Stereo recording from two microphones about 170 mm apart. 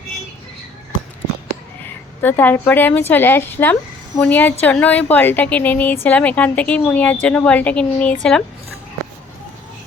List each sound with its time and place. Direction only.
2.2 s a woman's voice: 10° left (ahead or behind)